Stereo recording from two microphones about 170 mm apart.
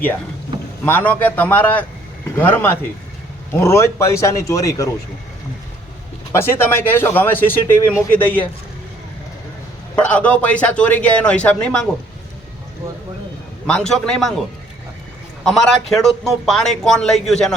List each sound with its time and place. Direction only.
0.9 s speech: 10° left (ahead or behind)
6.3 s speech: 15° left (ahead or behind)
9.9 s speech: 10° left (ahead or behind)
13.7 s a man's voice: 5° left (ahead or behind)
15.4 s a man's voice: centre (ahead or behind)